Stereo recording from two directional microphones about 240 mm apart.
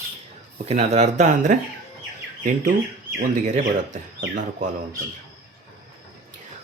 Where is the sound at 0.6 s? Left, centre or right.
Right.